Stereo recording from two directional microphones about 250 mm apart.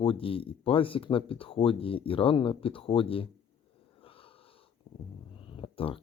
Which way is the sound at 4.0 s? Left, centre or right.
Left.